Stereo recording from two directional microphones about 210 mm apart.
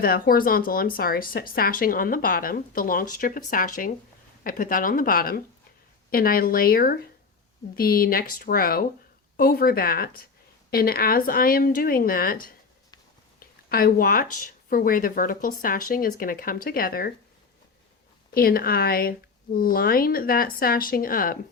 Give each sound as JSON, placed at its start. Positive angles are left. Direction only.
{"t": 0.0, "sound": "speech", "side_deg": 45}
{"t": 18.3, "sound": "speech", "side_deg": 45}